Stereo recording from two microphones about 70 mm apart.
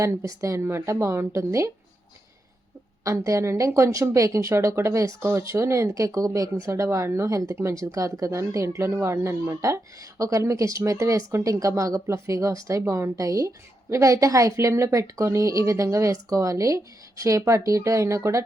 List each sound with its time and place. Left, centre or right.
0.0 s a woman's voice: right
3.0 s a woman's voice: right